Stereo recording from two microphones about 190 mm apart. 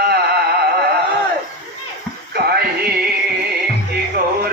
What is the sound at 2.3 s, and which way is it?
Music, 55° right (ahead or behind).